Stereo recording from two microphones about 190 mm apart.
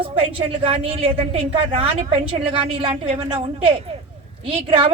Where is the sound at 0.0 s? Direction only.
30° right (ahead or behind).